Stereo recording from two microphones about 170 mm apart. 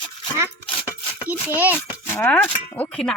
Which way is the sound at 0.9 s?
10° right (ahead or behind).